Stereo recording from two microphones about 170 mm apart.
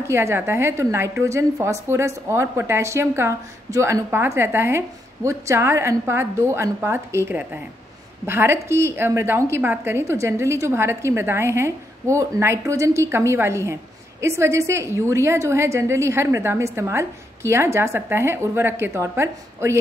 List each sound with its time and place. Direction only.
0.0 s a woman's voice: 15° right (ahead or behind)